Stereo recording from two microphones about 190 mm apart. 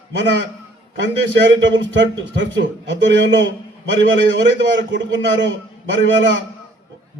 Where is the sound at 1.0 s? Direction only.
75° right (ahead or behind).